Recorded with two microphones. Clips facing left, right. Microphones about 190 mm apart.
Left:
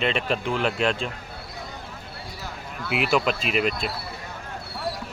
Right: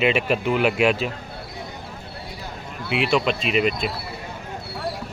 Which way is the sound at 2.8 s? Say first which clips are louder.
Right 2 dB; 5° left (ahead or behind).